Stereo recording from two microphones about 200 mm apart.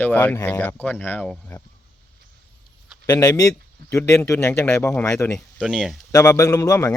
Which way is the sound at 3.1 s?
15° left (ahead or behind).